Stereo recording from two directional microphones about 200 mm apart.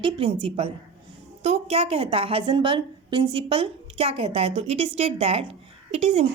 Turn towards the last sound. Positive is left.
turn(degrees=-30)  # may be behind; listen again after turning